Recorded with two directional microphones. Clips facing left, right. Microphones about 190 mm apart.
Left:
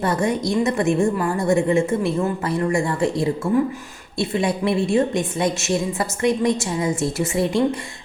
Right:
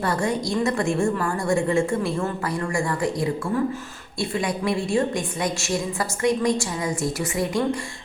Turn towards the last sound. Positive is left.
turn(degrees=25)  # may be behind; listen again after turning